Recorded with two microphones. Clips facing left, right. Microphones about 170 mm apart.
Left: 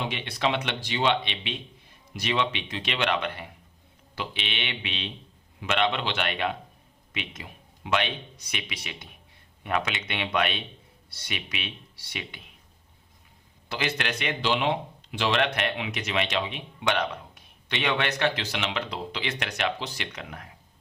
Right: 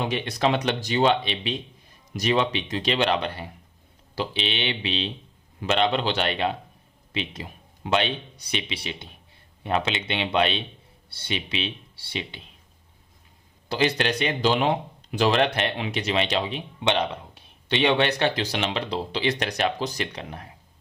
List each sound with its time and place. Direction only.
0.0 s speech: 40° right (ahead or behind)
13.7 s speech: 35° right (ahead or behind)